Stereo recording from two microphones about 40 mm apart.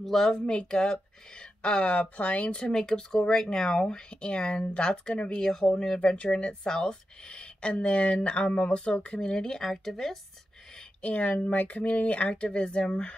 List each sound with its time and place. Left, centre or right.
0.0 s speech: centre
0.3 s speech: left
2.6 s speech: centre; by 5.4 s left
5.4 s speech: centre
5.9 s speech: left
9.6 s speech: centre
11.0 s speech: left